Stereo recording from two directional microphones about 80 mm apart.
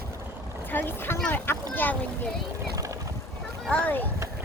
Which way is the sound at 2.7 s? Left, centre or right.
Right.